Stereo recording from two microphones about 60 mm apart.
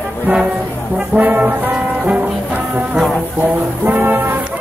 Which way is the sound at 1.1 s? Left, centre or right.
Right.